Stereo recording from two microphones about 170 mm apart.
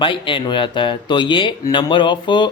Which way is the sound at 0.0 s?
30° left (ahead or behind).